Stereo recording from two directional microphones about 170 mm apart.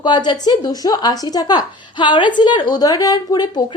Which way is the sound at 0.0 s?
25° left (ahead or behind).